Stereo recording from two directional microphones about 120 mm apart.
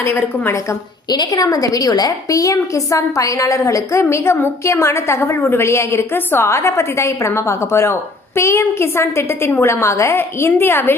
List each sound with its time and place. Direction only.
0.0 s a woman's voice: 20° left (ahead or behind)
1.1 s a woman's voice: 35° left (ahead or behind)